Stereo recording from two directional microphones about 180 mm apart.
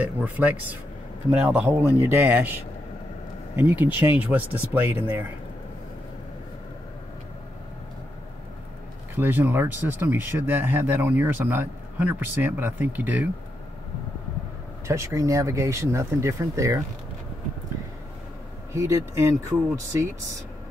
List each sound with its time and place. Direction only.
0.0 s speech: 10° right (ahead or behind)
9.1 s speech: 10° right (ahead or behind)
14.9 s speech: 15° right (ahead or behind)
18.7 s speech: 15° right (ahead or behind)